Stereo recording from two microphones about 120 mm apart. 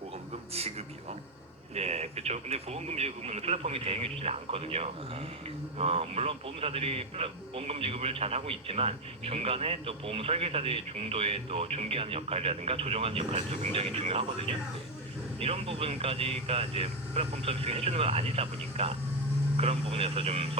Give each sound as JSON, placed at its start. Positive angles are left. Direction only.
{"t": 1.7, "sound": "a man's voice", "side_deg": -60}